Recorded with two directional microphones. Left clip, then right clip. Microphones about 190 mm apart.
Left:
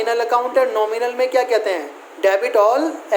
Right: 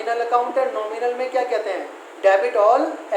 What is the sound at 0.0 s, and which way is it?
Speech, 65° left (ahead or behind).